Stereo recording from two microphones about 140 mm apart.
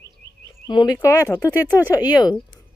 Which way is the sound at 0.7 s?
30° left (ahead or behind).